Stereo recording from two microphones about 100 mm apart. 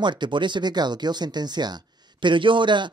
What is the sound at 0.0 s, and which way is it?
A man's voice, 50° right (ahead or behind).